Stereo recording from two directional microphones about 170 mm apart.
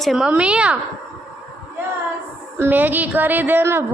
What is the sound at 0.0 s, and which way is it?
Speech, centre (ahead or behind).